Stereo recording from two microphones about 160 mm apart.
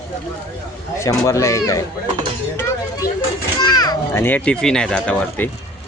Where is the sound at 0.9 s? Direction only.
20° left (ahead or behind).